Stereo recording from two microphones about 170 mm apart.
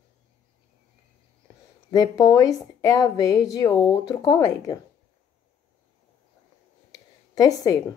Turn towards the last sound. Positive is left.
turn(degrees=20)  # may be behind; listen again after turning